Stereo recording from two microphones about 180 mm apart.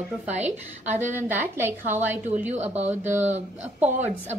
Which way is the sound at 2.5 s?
40° right (ahead or behind).